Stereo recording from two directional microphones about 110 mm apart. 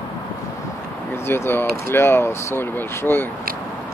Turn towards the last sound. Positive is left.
turn(degrees=20)  # may be behind; listen again after turning